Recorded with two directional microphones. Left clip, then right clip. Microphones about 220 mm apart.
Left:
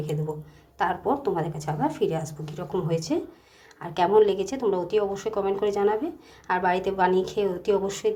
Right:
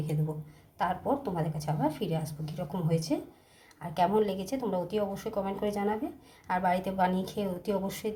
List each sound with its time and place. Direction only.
0.8 s a woman's voice: 15° left (ahead or behind)